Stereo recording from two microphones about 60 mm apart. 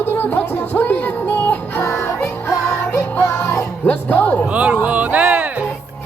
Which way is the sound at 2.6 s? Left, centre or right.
Left.